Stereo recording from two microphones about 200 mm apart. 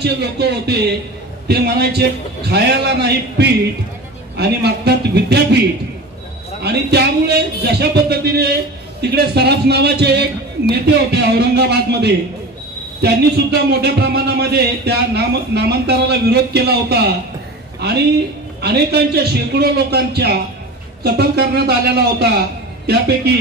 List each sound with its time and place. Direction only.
0.0 s a man's voice: 55° right (ahead or behind)
6.6 s a man's voice: 55° right (ahead or behind)
18.6 s a man's voice: 55° right (ahead or behind)
22.8 s a man's voice: 55° right (ahead or behind)